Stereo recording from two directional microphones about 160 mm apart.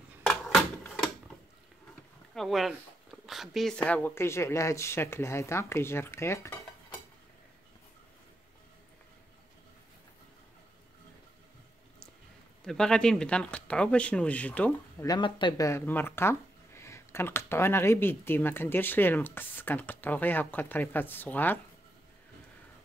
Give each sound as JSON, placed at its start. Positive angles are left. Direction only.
{"t": 0.3, "sound": "a sound", "side_deg": 5}
{"t": 2.3, "sound": "speech", "side_deg": 0}
{"t": 12.6, "sound": "speech", "side_deg": 5}
{"t": 15.0, "sound": "speech", "side_deg": 30}